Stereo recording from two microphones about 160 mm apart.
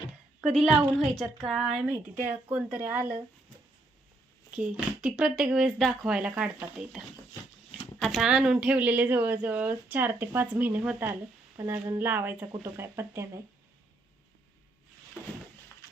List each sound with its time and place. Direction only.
0.4 s speech: centre (ahead or behind)
4.5 s speech: 5° right (ahead or behind)
8.0 s speech: centre (ahead or behind); by 13.4 s 15° right (ahead or behind)